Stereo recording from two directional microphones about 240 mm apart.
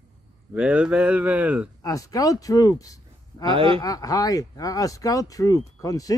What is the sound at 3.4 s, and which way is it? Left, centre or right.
Speech, right.